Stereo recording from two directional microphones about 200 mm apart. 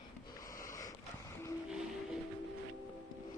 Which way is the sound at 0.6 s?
15° left (ahead or behind).